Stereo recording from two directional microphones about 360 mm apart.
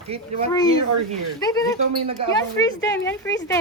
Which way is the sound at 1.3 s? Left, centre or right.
Centre.